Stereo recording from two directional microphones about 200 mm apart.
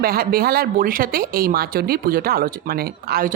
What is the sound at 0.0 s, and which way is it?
Speech, 50° right (ahead or behind).